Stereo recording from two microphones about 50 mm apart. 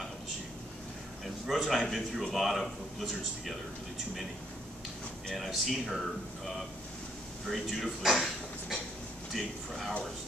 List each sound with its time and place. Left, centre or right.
1.2 s a man's voice: centre
5.3 s speech: centre
7.4 s speech: centre
9.3 s speech: centre